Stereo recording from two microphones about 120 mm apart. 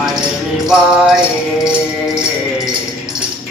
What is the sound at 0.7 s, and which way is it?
Music, 5° right (ahead or behind).